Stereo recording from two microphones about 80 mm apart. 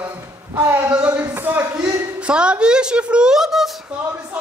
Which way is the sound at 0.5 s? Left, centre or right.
Right.